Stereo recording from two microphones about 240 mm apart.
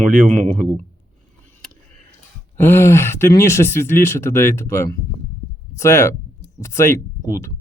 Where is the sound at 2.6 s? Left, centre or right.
Centre.